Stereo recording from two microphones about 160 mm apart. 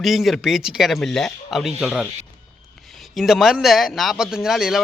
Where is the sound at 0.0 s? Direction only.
Centre (ahead or behind).